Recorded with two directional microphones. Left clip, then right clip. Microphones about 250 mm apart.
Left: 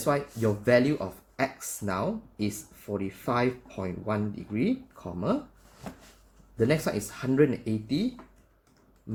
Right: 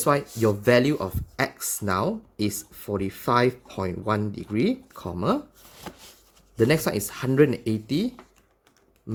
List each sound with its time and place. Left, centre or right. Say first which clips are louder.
0.0 s speech: right 5 dB; right
6.6 s speech: right 4 dB; right